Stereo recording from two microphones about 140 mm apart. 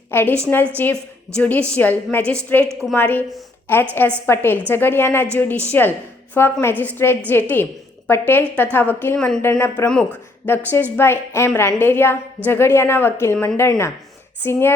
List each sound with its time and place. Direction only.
0.1 s a woman's voice: 15° left (ahead or behind)
9.4 s a woman's voice: 15° left (ahead or behind)